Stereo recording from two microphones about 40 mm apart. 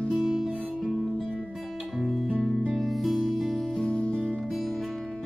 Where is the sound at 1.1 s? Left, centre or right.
Centre.